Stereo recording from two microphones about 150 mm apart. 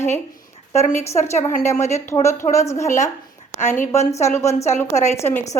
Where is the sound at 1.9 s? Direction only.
20° left (ahead or behind).